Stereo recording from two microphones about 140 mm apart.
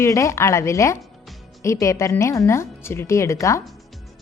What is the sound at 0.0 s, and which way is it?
A woman's voice, 20° left (ahead or behind).